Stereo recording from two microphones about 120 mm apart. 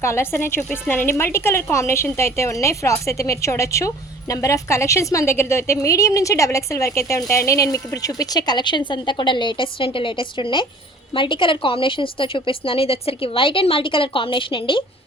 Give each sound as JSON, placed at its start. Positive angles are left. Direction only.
{"t": 0.0, "sound": "a woman's voice", "side_deg": 20}